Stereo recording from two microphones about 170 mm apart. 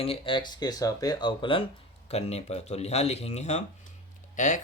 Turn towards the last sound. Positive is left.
turn(degrees=50)  # may be behind; listen again after turning